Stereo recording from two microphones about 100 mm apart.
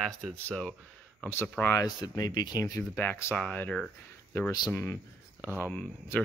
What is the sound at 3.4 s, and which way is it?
Speech, 15° left (ahead or behind).